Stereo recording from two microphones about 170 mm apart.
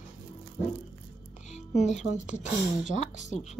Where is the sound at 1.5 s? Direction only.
40° left (ahead or behind).